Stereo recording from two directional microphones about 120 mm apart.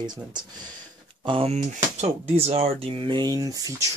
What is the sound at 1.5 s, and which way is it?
Speech, 70° right (ahead or behind).